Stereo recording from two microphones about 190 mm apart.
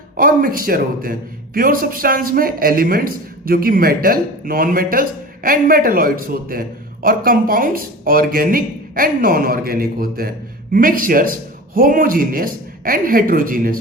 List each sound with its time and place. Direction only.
0.2 s a man's voice: 50° right (ahead or behind)